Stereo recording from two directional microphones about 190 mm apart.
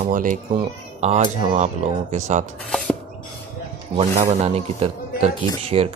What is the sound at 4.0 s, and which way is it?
Speech, 35° right (ahead or behind).